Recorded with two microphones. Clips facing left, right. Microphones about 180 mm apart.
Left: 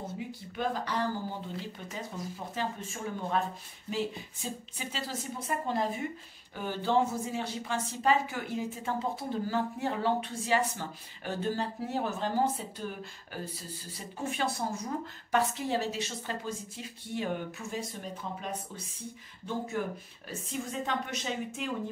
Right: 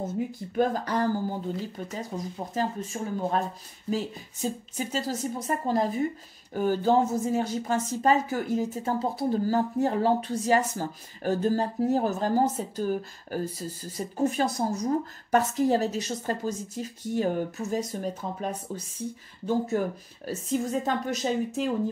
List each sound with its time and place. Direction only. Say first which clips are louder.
0.6 s speech: right 7 dB; 45° right (ahead or behind)